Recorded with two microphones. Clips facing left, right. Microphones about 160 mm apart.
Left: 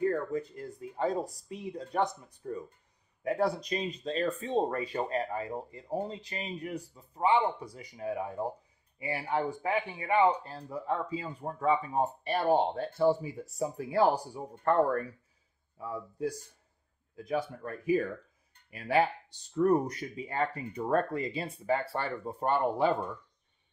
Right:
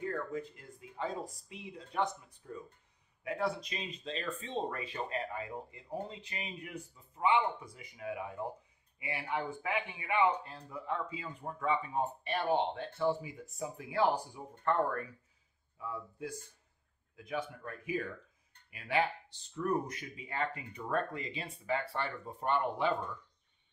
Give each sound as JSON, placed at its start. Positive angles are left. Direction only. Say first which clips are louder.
{"t": 0.1, "sound": "speech", "louder": "left 6 dB", "side_deg": 40}